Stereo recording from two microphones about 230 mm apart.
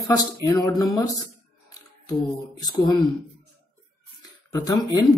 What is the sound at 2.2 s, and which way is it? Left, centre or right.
Speech, centre.